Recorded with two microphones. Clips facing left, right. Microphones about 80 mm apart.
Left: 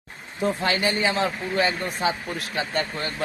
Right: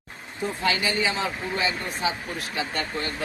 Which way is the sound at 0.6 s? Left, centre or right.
Left.